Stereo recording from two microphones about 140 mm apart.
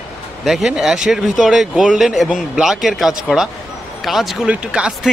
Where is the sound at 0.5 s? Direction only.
Centre (ahead or behind).